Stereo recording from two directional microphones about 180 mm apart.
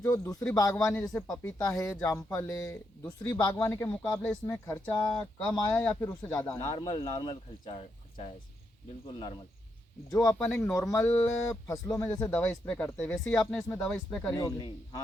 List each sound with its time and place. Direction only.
0.0 s speech: 15° left (ahead or behind)
10.1 s speech: 15° left (ahead or behind)
14.3 s a man's voice: 20° left (ahead or behind)